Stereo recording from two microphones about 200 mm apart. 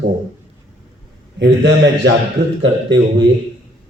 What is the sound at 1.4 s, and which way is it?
Speech, 65° right (ahead or behind).